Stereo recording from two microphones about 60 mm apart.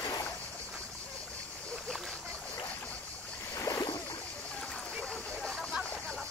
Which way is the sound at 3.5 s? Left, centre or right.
Left.